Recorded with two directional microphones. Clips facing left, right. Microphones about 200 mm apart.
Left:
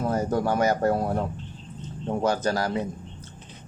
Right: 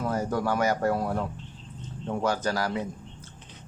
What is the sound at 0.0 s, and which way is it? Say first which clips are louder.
Speech: left 3 dB; 20° left (ahead or behind).